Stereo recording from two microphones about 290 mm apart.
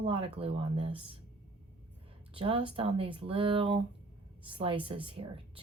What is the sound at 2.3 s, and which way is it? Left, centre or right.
Speech, centre.